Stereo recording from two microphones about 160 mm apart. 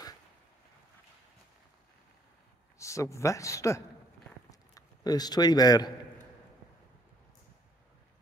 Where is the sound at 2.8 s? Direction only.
20° left (ahead or behind).